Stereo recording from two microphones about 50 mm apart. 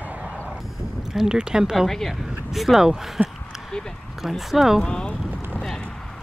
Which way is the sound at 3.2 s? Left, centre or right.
Right.